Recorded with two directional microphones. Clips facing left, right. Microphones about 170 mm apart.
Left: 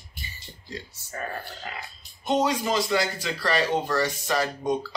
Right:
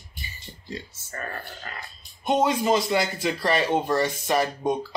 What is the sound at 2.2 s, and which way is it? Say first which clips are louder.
A man's voice: right 2 dB; 20° right (ahead or behind).